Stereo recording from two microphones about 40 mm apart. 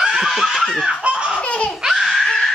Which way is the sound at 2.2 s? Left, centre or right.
Centre.